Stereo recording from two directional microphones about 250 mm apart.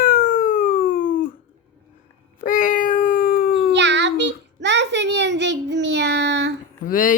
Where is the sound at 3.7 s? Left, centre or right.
Right.